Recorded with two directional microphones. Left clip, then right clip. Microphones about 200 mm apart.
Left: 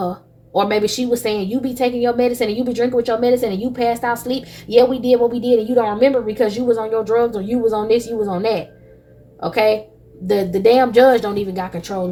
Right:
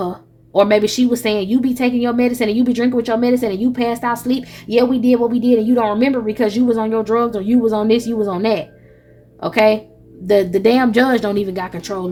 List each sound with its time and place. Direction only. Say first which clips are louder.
0.5 s a woman's voice: right 4 dB; 40° right (ahead or behind)